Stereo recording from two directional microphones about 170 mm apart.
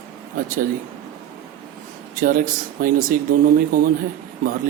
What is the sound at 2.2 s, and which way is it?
Speech, 50° right (ahead or behind).